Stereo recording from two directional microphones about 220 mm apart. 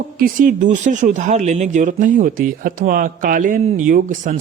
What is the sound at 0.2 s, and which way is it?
A man's voice, 35° right (ahead or behind).